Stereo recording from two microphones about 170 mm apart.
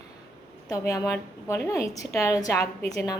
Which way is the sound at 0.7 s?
20° left (ahead or behind).